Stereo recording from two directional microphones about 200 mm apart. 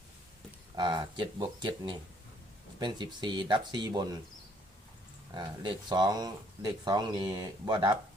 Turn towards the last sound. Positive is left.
turn(degrees=-20)  # may be behind; listen again after turning